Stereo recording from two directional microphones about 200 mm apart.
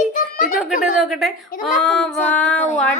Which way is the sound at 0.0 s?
45° left (ahead or behind).